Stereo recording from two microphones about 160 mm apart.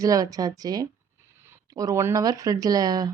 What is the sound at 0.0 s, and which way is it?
Speech, 20° right (ahead or behind).